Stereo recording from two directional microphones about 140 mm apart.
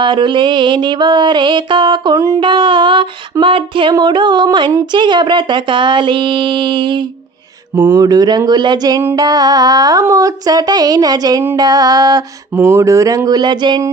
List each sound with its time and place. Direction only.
0.0 s mantra: 35° right (ahead or behind)
2.1 s speech: 20° right (ahead or behind)
2.4 s mantra: 35° right (ahead or behind)
7.8 s a sound: 15° right (ahead or behind)
8.0 s speech: 30° right (ahead or behind)